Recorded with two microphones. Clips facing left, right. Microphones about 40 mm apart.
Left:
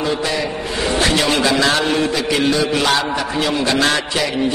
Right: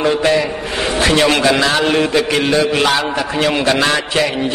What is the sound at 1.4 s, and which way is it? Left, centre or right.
Speech, centre.